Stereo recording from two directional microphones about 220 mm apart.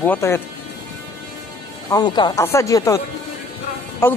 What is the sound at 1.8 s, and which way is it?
Speech, 20° left (ahead or behind).